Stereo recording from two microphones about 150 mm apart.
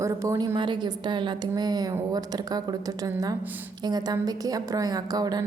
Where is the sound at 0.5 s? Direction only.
30° right (ahead or behind).